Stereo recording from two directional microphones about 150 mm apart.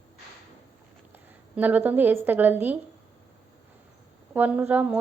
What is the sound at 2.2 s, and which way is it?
Speech, 10° right (ahead or behind).